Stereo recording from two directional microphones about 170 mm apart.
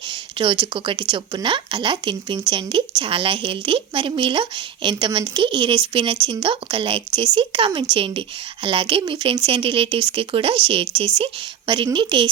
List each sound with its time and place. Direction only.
0.1 s a woman's voice: 30° right (ahead or behind)